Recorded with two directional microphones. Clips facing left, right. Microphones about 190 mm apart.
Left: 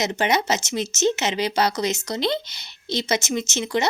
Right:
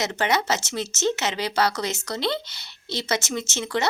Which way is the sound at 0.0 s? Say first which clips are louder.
Left 2 dB; 20° left (ahead or behind).